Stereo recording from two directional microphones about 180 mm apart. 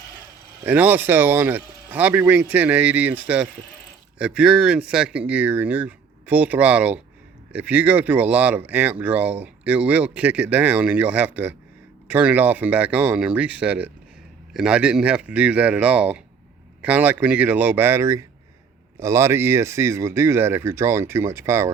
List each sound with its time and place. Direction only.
0.6 s speech: 10° right (ahead or behind)